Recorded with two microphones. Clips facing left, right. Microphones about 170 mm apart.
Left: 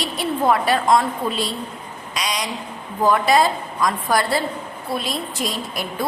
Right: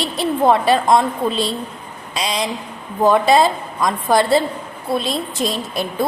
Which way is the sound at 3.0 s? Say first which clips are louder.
Right 3 dB; 25° right (ahead or behind).